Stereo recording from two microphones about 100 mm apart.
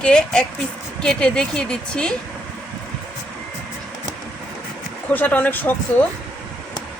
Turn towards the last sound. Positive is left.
turn(degrees=15)  # may be behind; listen again after turning